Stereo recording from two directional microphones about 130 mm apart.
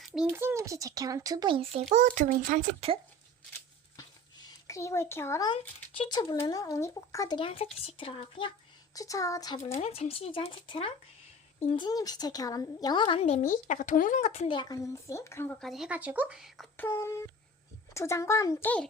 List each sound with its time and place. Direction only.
0.0 s a sound: centre (ahead or behind)
0.3 s speech: 20° right (ahead or behind)
1.9 s a child's voice: 80° right
3.9 s a sound: 30° left (ahead or behind)
6.0 s speech: 40° left (ahead or behind)
7.3 s speech: 45° left (ahead or behind)
9.0 s speech: 25° left (ahead or behind)
9.7 s speech: 55° left (ahead or behind)
11.9 s speech: 30° left (ahead or behind); by 14.4 s 65° left (ahead or behind)
14.4 s speech: 35° left (ahead or behind)
15.0 s speech: 20° left (ahead or behind)
15.4 s speech: 5° left (ahead or behind)
16.7 s speech: 15° left (ahead or behind)